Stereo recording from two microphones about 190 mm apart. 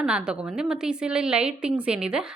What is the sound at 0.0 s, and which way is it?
A woman's voice, 5° right (ahead or behind).